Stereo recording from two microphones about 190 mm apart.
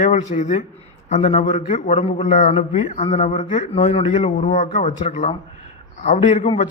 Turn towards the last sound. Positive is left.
turn(degrees=40)  # may be behind; listen again after turning